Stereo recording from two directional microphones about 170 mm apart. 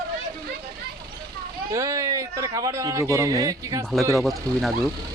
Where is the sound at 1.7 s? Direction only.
15° right (ahead or behind).